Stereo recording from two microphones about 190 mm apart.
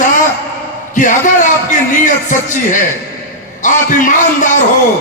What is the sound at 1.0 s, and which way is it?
Speech, 40° left (ahead or behind).